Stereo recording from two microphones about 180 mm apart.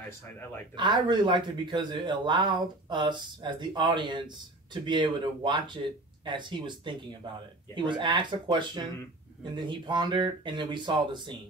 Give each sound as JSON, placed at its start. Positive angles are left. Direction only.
{"t": 0.7, "sound": "speech", "side_deg": -25}